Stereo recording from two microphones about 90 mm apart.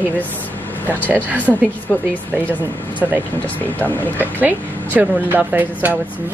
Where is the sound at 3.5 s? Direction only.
20° left (ahead or behind).